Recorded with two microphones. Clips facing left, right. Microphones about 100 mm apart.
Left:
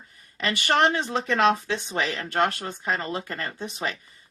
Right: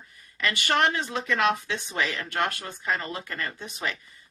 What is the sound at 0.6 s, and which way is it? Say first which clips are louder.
Speech: left 3 dB; 30° left (ahead or behind).